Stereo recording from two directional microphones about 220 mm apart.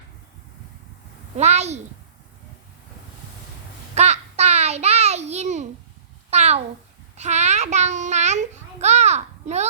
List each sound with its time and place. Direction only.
1.4 s a woman's voice: 30° right (ahead or behind)
3.9 s a sound: 30° right (ahead or behind)
7.2 s babbling: 30° right (ahead or behind)